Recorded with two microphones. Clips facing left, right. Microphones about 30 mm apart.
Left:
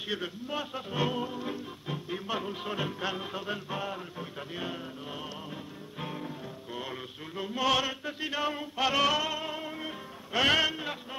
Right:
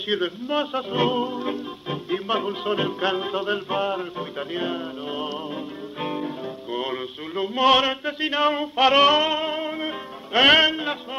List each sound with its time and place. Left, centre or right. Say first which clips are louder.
0.1 s speech: right 11 dB; right
5.9 s music: right 10 dB; right